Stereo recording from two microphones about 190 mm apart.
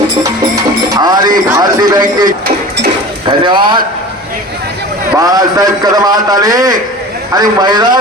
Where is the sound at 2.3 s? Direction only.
50° right (ahead or behind).